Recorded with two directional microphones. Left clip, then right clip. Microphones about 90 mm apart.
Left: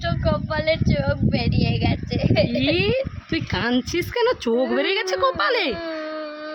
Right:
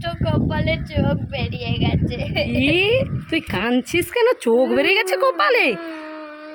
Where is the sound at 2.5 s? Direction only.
30° right (ahead or behind).